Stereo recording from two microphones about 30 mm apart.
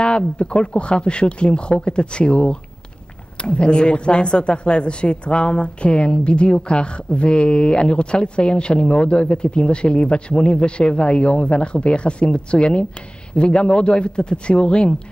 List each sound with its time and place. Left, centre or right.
0.0 s speech: left